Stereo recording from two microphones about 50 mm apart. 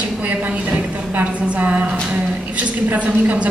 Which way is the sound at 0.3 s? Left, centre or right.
Right.